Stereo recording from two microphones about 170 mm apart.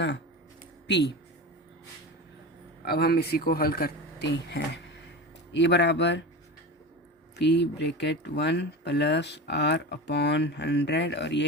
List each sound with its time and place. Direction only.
0.9 s speech: 90° left
2.8 s speech: 65° left (ahead or behind); by 6.2 s 90° left
7.3 s speech: 90° left